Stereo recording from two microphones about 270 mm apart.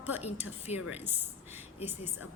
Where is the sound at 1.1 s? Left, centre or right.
Centre.